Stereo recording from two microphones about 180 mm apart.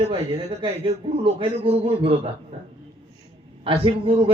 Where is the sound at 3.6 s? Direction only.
30° right (ahead or behind).